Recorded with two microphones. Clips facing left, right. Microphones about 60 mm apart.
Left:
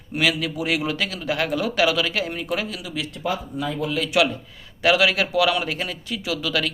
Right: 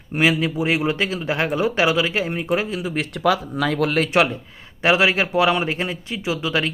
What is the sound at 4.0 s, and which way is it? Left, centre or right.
Speech, right.